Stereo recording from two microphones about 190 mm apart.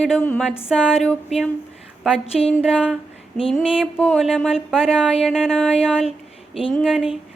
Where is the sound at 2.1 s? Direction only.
30° left (ahead or behind).